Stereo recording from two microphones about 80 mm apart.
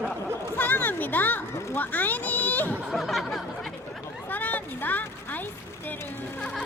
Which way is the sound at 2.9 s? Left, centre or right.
Centre.